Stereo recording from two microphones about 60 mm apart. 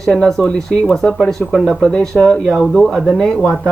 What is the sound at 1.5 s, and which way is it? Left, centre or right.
Speech, centre.